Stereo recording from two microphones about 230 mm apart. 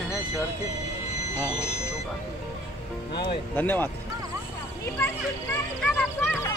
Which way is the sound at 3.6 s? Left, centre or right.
Centre.